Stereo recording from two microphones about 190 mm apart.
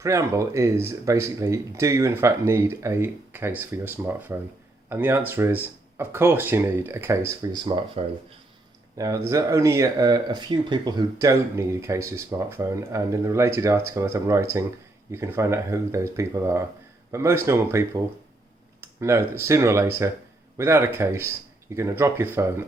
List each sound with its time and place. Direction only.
0.0 s speech: 15° right (ahead or behind)
8.0 s speech: 30° right (ahead or behind)
9.0 s speech: 15° right (ahead or behind)